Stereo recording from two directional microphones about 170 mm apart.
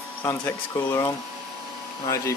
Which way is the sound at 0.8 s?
20° left (ahead or behind).